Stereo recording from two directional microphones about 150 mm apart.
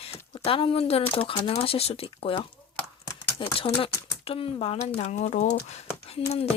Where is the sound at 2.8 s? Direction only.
10° left (ahead or behind).